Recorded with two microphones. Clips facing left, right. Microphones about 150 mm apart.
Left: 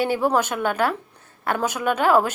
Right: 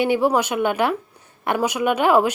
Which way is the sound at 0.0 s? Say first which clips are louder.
Right 2 dB; 15° right (ahead or behind).